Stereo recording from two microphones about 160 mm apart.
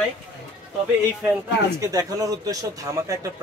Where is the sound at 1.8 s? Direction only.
20° right (ahead or behind).